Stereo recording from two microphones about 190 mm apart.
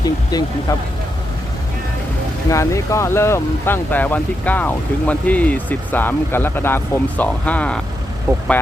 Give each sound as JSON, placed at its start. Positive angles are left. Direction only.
{"t": 0.0, "sound": "speech", "side_deg": 20}
{"t": 2.5, "sound": "speech", "side_deg": 15}
{"t": 8.3, "sound": "speech", "side_deg": -10}